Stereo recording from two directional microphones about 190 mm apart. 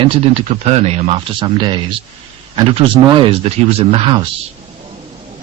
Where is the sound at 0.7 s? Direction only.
35° right (ahead or behind).